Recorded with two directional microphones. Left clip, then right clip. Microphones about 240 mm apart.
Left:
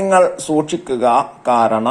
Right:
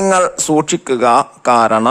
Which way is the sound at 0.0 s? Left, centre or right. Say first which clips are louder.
Even; right.